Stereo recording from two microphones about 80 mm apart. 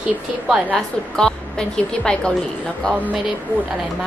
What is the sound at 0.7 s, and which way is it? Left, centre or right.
A woman's voice, centre.